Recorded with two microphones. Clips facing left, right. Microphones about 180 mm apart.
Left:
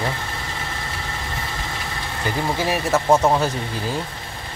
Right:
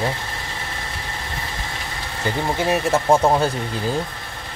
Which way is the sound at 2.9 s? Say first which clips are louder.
Even; 30° right (ahead or behind).